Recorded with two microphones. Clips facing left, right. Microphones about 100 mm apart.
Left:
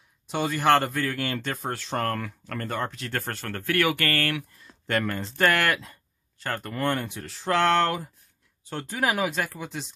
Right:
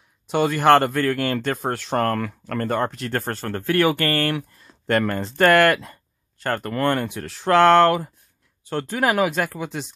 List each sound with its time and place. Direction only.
0.3 s speech: 60° right (ahead or behind); by 4.5 s 30° right (ahead or behind)
4.8 s speech: 45° right (ahead or behind)